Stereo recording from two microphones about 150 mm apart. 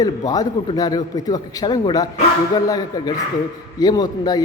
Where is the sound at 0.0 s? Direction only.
25° left (ahead or behind).